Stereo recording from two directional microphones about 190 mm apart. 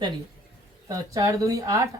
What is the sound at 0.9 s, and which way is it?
Speech, 15° right (ahead or behind).